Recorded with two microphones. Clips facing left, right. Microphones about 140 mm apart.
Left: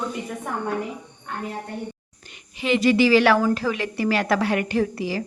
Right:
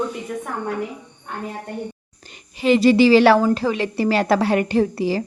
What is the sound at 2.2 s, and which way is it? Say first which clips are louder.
A woman's voice: right 7 dB; 35° right (ahead or behind).